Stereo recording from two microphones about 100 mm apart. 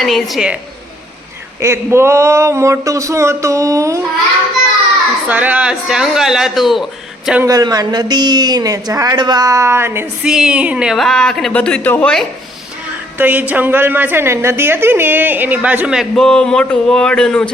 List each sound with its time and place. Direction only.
0.0 s a man's voice: centre (ahead or behind)
1.6 s a woman's voice: 25° right (ahead or behind)
5.3 s a man's voice: 15° right (ahead or behind)
7.4 s speech: 40° right (ahead or behind)
10.2 s a woman's voice: 5° right (ahead or behind)
10.9 s a man's voice: 5° left (ahead or behind)
11.5 s a sound: 10° left (ahead or behind)
13.1 s a woman's voice: 15° right (ahead or behind)
15.9 s a man's voice: 5° right (ahead or behind)
16.2 s a sound: 10° left (ahead or behind)